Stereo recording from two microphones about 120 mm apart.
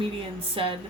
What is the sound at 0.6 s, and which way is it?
Speech, 50° right (ahead or behind).